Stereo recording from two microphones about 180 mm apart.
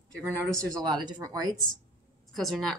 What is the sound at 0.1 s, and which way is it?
Speech, 5° left (ahead or behind).